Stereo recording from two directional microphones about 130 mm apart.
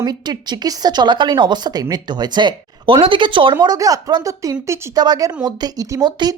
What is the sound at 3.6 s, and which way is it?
Speech, 30° right (ahead or behind).